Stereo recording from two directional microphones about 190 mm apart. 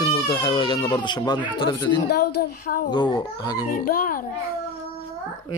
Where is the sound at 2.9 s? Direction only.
20° left (ahead or behind).